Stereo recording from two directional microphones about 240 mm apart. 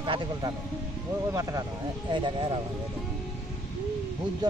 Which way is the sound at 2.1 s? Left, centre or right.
Centre.